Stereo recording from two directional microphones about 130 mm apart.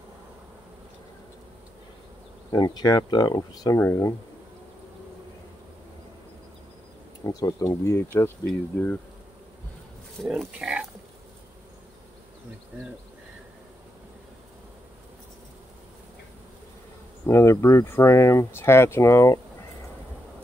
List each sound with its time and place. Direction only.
2.5 s speech: 30° left (ahead or behind)
7.2 s speech: 30° left (ahead or behind)
8.5 s speech: 10° left (ahead or behind)
10.2 s speech: 5° right (ahead or behind)
17.3 s speech: 20° left (ahead or behind)